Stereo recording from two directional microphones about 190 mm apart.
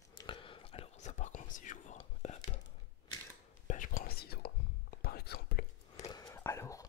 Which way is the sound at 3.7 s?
45° left (ahead or behind).